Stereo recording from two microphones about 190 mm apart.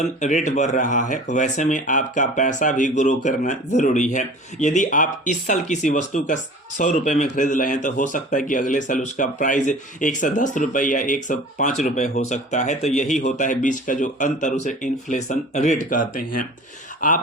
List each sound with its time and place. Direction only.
0.0 s speech: 40° left (ahead or behind)